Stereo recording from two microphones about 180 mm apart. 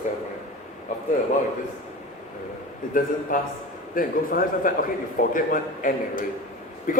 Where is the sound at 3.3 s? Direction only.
50° left (ahead or behind).